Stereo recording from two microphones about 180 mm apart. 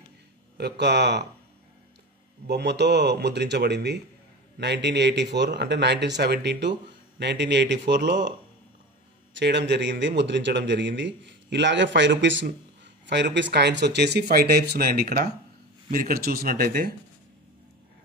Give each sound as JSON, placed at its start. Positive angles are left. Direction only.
{"t": 0.6, "sound": "speech", "side_deg": -70}
{"t": 2.4, "sound": "a man's voice", "side_deg": -70}
{"t": 13.0, "sound": "speech", "side_deg": -75}